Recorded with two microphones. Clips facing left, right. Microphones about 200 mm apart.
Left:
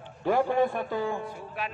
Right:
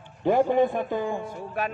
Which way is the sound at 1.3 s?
45° right (ahead or behind).